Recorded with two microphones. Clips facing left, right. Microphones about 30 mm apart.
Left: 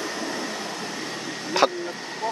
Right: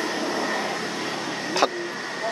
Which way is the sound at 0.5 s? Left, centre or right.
Right.